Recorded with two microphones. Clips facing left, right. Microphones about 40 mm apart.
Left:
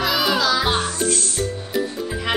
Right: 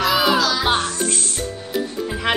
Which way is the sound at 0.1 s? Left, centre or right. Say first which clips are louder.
Right 4 dB; centre.